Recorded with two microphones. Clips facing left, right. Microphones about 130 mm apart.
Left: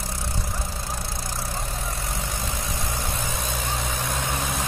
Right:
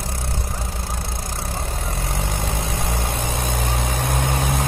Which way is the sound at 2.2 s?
60° right (ahead or behind).